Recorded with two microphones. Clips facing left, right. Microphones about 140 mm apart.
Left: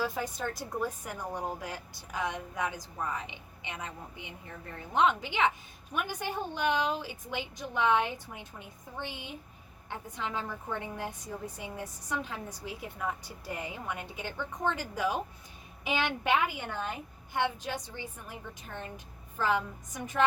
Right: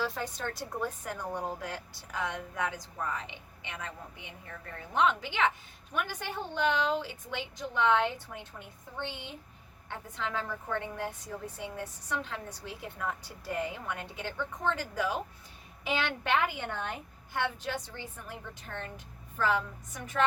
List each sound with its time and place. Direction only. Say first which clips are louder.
0.0 s a woman's voice: left 1 dB; 10° left (ahead or behind)